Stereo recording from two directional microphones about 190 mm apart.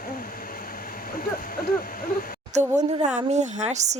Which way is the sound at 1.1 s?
50° left (ahead or behind).